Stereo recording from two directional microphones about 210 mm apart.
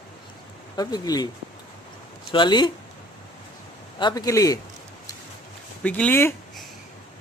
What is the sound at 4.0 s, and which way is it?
Speech, 20° left (ahead or behind).